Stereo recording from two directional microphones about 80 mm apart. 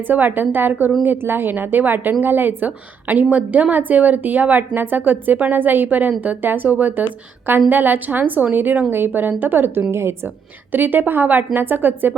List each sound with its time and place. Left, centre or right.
0.1 s a woman's voice: right